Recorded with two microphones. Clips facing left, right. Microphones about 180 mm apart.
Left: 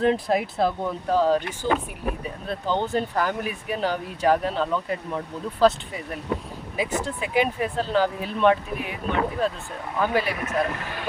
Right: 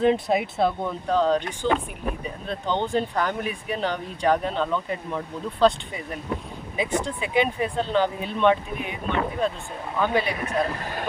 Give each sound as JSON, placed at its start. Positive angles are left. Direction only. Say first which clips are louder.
{"t": 0.0, "sound": "speech", "louder": "right 1 dB", "side_deg": 0}
{"t": 10.4, "sound": "speech", "louder": "even", "side_deg": -35}